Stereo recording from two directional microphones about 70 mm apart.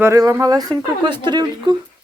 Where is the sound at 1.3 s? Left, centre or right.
Right.